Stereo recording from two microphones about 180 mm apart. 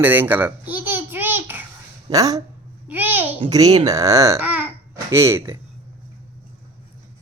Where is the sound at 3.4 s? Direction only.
20° right (ahead or behind).